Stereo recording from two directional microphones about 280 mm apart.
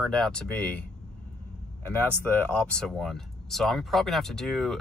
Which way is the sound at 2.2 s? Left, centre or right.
Centre.